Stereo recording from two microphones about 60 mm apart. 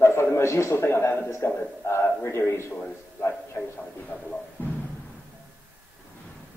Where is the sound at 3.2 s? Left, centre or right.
Left.